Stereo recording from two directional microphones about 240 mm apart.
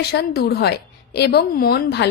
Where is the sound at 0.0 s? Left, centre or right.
Left.